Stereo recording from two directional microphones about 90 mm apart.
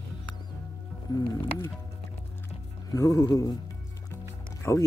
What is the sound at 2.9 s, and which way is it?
Speech, 40° left (ahead or behind).